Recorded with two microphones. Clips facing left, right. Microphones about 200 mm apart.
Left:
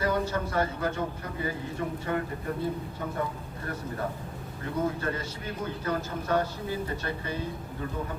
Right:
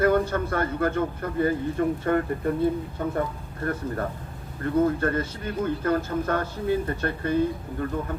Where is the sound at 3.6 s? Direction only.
55° right (ahead or behind).